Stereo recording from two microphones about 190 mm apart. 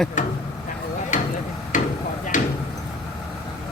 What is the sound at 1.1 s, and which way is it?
Hammer, 40° left (ahead or behind).